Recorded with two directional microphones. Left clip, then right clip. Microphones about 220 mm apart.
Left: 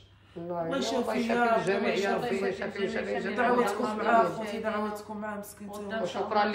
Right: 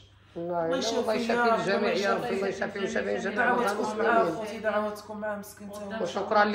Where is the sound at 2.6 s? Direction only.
30° right (ahead or behind).